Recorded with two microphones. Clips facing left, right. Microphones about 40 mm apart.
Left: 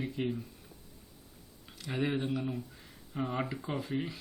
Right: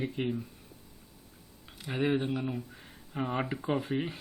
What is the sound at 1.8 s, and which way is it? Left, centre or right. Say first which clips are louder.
Speech: right 3 dB; centre.